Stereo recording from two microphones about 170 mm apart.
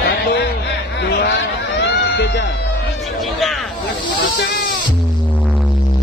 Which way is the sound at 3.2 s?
Centre (ahead or behind).